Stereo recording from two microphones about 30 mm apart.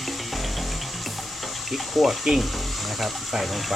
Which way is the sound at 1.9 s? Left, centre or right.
Centre.